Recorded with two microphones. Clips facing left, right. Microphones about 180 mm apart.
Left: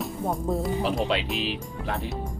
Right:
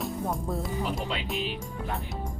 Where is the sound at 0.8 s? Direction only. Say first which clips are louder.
Left 6 dB; 75° left (ahead or behind).